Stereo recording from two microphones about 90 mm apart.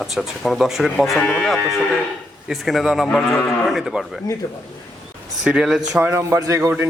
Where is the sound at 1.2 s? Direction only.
15° left (ahead or behind).